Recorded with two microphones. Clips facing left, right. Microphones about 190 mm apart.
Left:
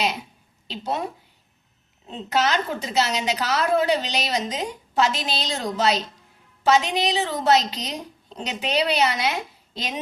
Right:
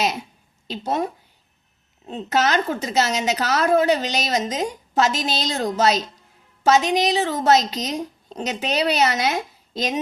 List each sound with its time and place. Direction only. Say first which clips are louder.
0.7 s a woman's voice: right 4 dB; 45° right (ahead or behind)
2.0 s a woman's voice: right 2 dB; 45° right (ahead or behind)